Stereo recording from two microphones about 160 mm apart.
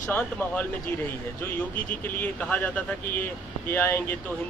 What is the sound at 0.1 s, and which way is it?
Speech, 10° left (ahead or behind).